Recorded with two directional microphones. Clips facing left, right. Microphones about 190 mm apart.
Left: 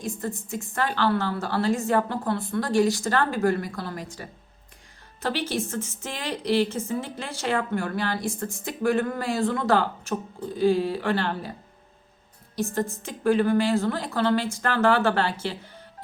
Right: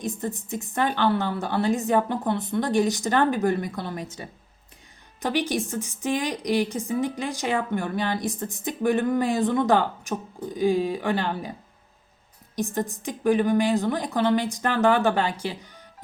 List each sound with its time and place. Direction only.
0.0 s a woman's voice: 20° right (ahead or behind)
12.5 s a woman's voice: 15° right (ahead or behind)